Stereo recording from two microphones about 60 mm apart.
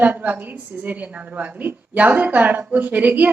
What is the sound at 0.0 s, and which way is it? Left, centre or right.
A woman's voice, right.